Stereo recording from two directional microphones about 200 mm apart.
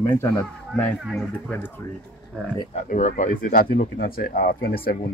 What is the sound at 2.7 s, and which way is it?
Speech, 35° left (ahead or behind).